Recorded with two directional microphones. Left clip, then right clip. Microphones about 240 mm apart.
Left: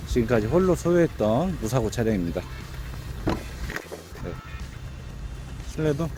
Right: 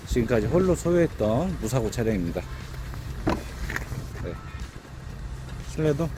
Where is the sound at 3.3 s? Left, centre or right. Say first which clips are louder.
Right 1 dB; centre.